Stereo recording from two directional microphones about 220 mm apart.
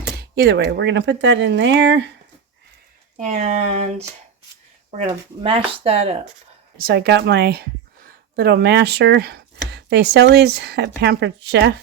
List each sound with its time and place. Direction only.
0.2 s speech: 50° right (ahead or behind)
3.2 s speech: 35° right (ahead or behind)
6.7 s speech: 45° right (ahead or behind)